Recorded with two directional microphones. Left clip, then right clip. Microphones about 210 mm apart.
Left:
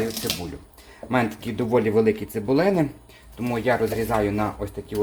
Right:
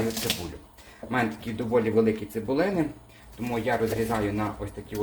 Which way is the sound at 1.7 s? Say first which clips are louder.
Left 3 dB; 55° left (ahead or behind).